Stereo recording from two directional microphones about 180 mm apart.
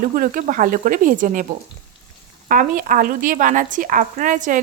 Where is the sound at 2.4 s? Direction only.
50° right (ahead or behind).